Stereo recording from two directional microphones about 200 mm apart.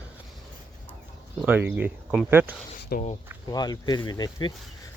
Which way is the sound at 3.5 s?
20° left (ahead or behind).